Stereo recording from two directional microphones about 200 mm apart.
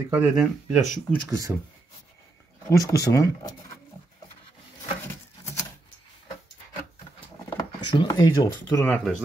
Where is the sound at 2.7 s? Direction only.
15° left (ahead or behind).